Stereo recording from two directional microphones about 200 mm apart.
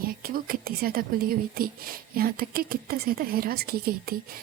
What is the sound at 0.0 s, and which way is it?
A woman's voice, 45° right (ahead or behind).